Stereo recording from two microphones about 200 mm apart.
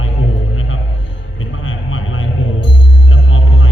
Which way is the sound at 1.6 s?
80° left.